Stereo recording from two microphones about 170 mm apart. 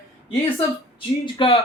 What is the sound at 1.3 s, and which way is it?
Speech, 30° left (ahead or behind).